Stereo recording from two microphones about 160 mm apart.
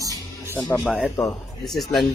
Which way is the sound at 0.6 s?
Centre (ahead or behind).